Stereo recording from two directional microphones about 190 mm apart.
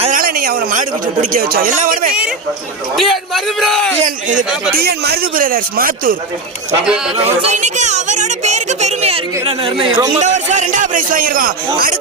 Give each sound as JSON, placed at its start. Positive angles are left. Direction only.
{"t": 0.0, "sound": "speech", "side_deg": -45}
{"t": 2.9, "sound": "a man's voice", "side_deg": 0}
{"t": 4.0, "sound": "speech", "side_deg": -40}
{"t": 4.8, "sound": "speech", "side_deg": -55}
{"t": 7.3, "sound": "a man's voice", "side_deg": -35}
{"t": 10.2, "sound": "speech", "side_deg": -40}